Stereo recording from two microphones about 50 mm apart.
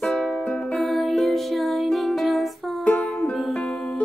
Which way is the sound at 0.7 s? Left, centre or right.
Centre.